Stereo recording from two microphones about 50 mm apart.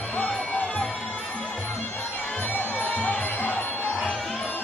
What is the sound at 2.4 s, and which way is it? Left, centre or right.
Music, left.